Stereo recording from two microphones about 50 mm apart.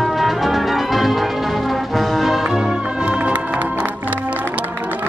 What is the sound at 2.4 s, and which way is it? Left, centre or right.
Music, centre.